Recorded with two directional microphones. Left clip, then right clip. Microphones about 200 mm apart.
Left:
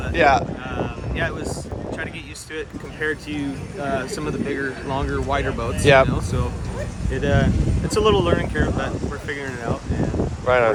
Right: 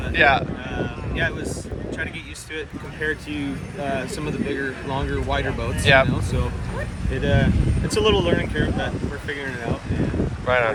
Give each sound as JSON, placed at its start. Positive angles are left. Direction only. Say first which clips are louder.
{"t": 0.2, "sound": "speech", "louder": "left 1 dB", "side_deg": 50}
{"t": 0.8, "sound": "vehicle", "louder": "right 1 dB", "side_deg": 0}
{"t": 2.6, "sound": "speech", "louder": "left 2 dB", "side_deg": 0}
{"t": 5.8, "sound": "speech", "louder": "left 2 dB", "side_deg": 55}
{"t": 7.1, "sound": "speech", "louder": "left 1 dB", "side_deg": 0}
{"t": 10.4, "sound": "speech", "louder": "left 3 dB", "side_deg": 50}